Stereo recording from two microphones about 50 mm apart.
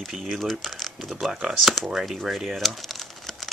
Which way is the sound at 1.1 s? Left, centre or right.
Centre.